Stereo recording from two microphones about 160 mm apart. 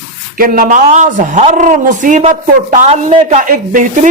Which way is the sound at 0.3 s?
60° right (ahead or behind).